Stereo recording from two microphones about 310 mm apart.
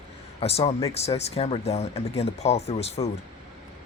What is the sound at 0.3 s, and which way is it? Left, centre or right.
Speech, centre.